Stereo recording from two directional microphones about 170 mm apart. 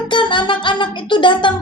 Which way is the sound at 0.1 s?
30° left (ahead or behind).